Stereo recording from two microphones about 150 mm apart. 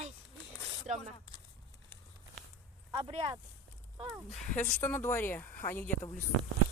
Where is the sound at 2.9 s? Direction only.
30° right (ahead or behind).